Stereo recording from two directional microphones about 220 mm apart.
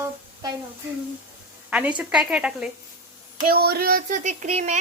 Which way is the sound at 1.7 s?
5° right (ahead or behind).